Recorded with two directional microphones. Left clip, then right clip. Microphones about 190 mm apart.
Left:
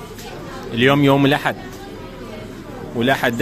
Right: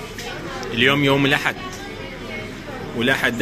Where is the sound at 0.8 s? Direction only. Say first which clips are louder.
Left 2 dB; 50° left (ahead or behind).